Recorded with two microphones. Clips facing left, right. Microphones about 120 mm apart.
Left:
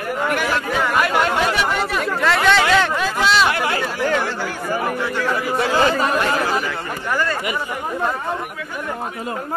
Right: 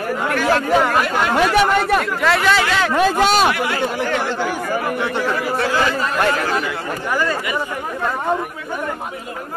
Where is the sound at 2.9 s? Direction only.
50° right (ahead or behind).